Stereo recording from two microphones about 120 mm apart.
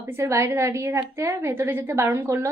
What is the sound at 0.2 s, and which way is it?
A woman's voice, 25° right (ahead or behind).